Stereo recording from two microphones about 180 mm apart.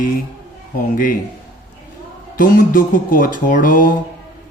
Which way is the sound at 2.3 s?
50° left (ahead or behind).